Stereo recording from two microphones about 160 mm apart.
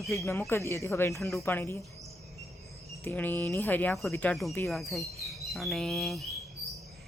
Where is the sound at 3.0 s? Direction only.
10° left (ahead or behind).